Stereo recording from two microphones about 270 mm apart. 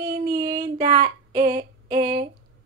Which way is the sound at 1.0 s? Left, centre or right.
Right.